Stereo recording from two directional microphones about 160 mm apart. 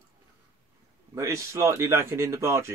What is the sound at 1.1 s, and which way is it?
Speech, 15° right (ahead or behind).